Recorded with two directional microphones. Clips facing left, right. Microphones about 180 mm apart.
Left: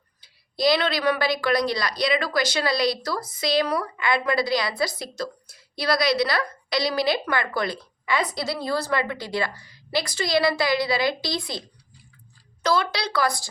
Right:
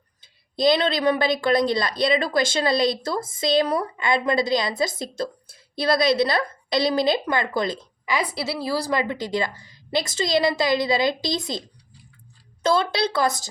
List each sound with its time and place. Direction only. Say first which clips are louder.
0.2 s a woman's voice: right 2 dB; 25° right (ahead or behind)
12.6 s a woman's voice: right 3 dB; 25° right (ahead or behind)